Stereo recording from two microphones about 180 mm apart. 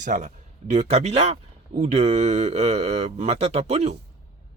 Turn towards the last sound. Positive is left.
turn(degrees=-35)  # may be behind; listen again after turning